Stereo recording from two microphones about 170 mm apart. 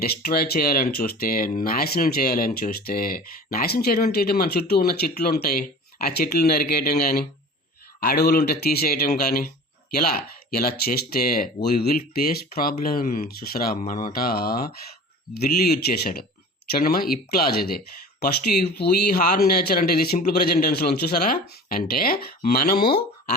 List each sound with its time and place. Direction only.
0.0 s speech: 65° left (ahead or behind)
10.5 s speech: 65° left (ahead or behind)